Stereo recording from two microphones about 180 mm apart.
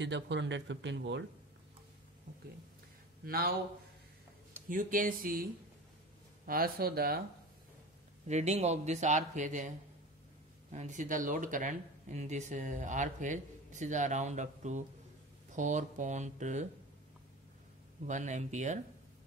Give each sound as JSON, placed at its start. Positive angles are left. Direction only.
{"t": 0.0, "sound": "speech", "side_deg": -80}
{"t": 3.3, "sound": "a man's voice", "side_deg": -55}
{"t": 4.6, "sound": "a man's voice", "side_deg": -50}
{"t": 8.3, "sound": "speech", "side_deg": -40}
{"t": 10.7, "sound": "speech", "side_deg": -40}
{"t": 18.0, "sound": "speech", "side_deg": -40}